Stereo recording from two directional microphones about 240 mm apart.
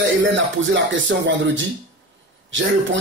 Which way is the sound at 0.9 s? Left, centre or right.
Right.